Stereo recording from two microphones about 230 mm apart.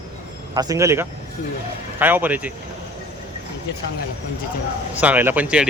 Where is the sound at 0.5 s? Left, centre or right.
Centre.